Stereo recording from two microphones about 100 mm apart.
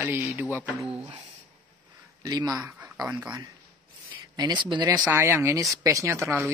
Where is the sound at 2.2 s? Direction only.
40° right (ahead or behind).